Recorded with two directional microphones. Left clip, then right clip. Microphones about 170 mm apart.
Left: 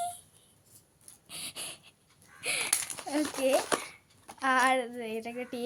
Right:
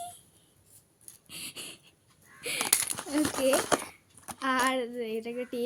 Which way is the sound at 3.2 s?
35° right (ahead or behind).